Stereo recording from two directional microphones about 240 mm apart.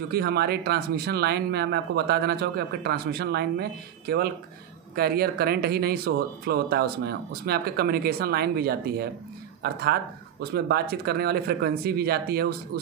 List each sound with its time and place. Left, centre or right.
0.1 s speech: right